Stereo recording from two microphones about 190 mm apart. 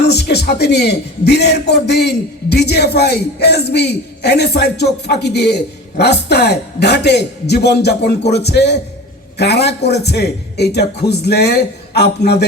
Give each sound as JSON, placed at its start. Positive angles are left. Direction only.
{"t": 0.1, "sound": "a man's voice", "side_deg": 60}